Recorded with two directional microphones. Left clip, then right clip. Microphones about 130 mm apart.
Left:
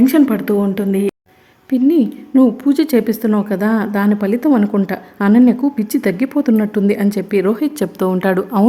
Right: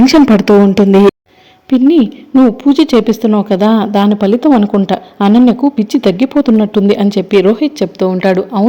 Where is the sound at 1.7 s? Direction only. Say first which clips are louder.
Right 5 dB; 20° right (ahead or behind).